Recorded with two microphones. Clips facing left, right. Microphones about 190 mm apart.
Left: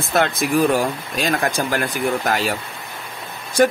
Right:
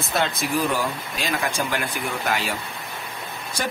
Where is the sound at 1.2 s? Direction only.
45° left (ahead or behind).